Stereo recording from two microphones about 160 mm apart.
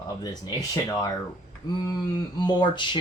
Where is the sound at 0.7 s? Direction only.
25° left (ahead or behind).